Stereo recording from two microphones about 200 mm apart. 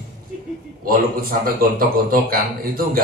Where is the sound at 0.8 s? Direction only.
45° right (ahead or behind).